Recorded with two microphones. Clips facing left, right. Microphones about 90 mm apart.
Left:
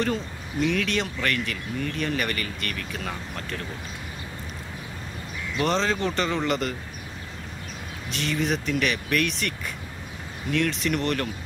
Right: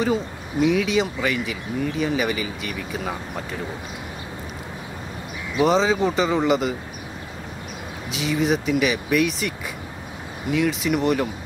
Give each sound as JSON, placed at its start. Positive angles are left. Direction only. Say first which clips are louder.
{"t": 0.0, "sound": "speech", "louder": "right 4 dB", "side_deg": -5}
{"t": 5.6, "sound": "speech", "louder": "right 6 dB", "side_deg": -5}
{"t": 8.1, "sound": "speech", "louder": "right 5 dB", "side_deg": -5}
{"t": 10.5, "sound": "speech", "louder": "right 4 dB", "side_deg": -5}